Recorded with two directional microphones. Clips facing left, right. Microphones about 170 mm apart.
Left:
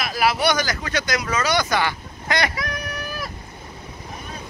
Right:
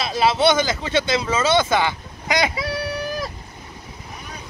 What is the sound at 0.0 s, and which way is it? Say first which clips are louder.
Speech: right 3 dB; 25° right (ahead or behind).